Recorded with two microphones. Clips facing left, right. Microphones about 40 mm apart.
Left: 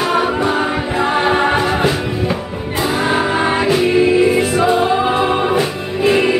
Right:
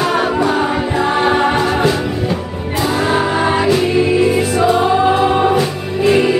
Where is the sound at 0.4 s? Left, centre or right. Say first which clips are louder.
Right 2 dB; centre.